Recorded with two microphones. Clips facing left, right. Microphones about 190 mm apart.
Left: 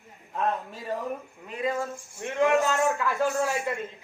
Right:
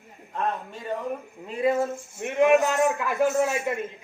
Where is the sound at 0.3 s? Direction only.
Centre (ahead or behind).